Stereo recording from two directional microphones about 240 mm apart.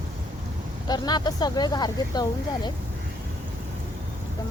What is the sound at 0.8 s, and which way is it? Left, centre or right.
Speech, centre.